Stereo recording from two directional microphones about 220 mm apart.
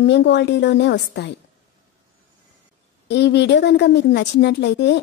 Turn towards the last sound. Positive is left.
turn(degrees=50)  # may be behind; listen again after turning